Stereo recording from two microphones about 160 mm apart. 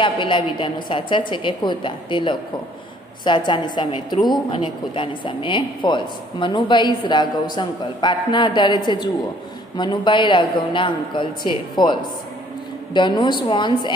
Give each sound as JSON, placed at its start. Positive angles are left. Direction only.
{"t": 0.0, "sound": "a woman's voice", "side_deg": 30}